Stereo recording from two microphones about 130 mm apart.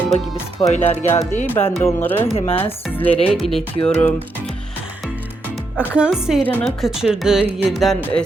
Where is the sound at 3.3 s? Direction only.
Centre (ahead or behind).